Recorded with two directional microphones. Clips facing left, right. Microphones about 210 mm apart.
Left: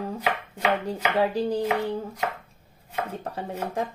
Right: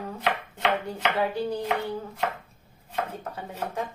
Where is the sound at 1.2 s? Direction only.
30° left (ahead or behind).